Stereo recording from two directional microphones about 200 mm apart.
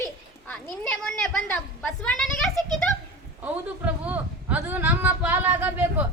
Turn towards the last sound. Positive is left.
turn(degrees=-10)  # may be behind; listen again after turning